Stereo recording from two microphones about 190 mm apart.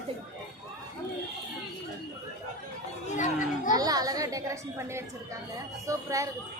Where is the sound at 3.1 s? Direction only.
45° left (ahead or behind).